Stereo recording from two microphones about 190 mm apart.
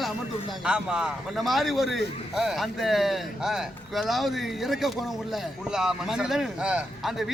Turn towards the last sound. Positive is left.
turn(degrees=-5)  # may be behind; listen again after turning